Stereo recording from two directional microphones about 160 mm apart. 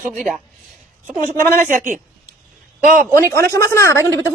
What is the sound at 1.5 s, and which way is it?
Speech, 55° right (ahead or behind).